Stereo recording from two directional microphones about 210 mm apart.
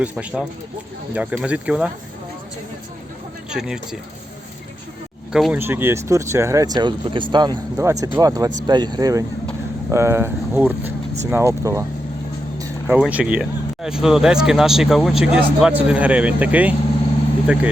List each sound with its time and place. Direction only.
0.0 s speech: 5° right (ahead or behind)
3.5 s speech: 5° right (ahead or behind)
5.3 s speech: 5° right (ahead or behind)
12.9 s speech: 5° right (ahead or behind)